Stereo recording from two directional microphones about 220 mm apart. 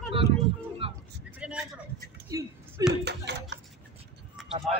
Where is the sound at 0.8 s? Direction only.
25° right (ahead or behind).